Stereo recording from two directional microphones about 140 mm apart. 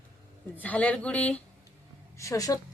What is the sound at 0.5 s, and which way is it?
Speech, 10° left (ahead or behind).